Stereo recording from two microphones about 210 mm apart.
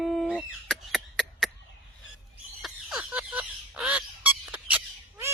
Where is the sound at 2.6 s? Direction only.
5° right (ahead or behind).